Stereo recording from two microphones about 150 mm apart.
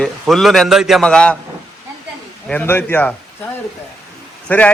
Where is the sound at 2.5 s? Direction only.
10° left (ahead or behind).